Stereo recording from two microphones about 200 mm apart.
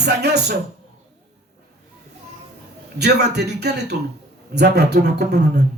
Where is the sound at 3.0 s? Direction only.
55° right (ahead or behind).